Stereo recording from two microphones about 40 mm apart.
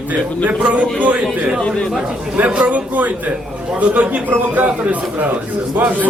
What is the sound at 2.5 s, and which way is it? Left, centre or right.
Speech, right.